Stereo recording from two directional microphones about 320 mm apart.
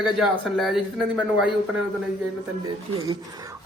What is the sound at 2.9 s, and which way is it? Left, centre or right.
Speech, centre.